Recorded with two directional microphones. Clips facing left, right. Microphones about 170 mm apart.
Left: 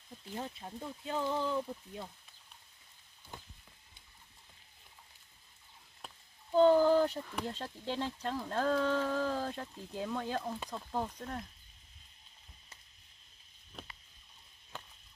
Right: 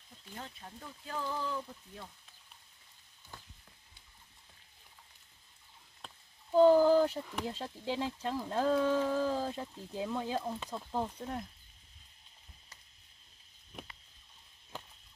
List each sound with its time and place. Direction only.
0.4 s speech: 25° left (ahead or behind)
6.5 s speech: 5° right (ahead or behind)